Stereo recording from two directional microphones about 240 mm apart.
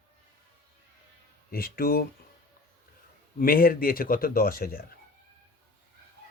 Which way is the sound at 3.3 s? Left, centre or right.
Left.